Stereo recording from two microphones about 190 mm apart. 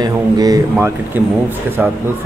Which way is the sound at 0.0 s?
20° right (ahead or behind).